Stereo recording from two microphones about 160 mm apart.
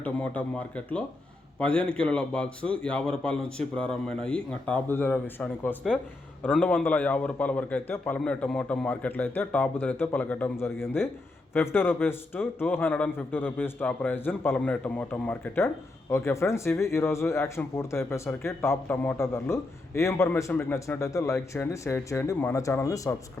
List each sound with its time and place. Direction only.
0.0 s a man's voice: 10° left (ahead or behind)